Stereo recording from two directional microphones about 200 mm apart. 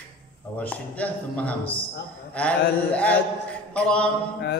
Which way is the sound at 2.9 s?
5° left (ahead or behind).